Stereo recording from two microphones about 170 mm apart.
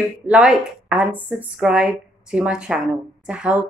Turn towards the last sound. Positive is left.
turn(degrees=-5)  # may be behind; listen again after turning